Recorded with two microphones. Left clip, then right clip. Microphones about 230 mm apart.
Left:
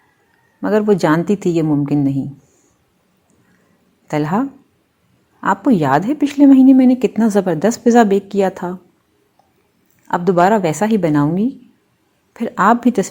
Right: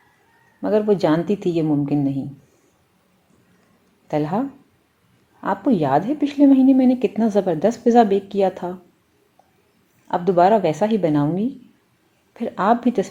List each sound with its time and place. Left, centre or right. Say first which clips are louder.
0.6 s a woman's voice: left 3 dB; left
4.1 s a woman's voice: left 4 dB; left
10.1 s a woman's voice: left 2 dB; left